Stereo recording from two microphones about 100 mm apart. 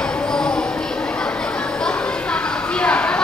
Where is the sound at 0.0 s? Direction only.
10° left (ahead or behind).